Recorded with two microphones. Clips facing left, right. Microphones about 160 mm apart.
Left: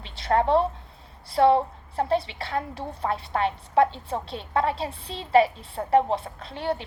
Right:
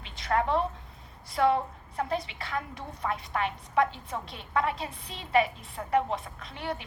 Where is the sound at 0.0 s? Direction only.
30° left (ahead or behind).